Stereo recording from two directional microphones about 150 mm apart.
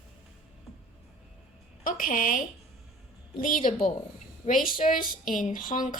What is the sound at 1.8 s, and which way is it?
A woman's voice, 65° left (ahead or behind).